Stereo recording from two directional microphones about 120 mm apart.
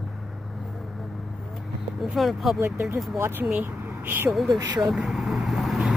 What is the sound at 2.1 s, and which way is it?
Speech, centre (ahead or behind).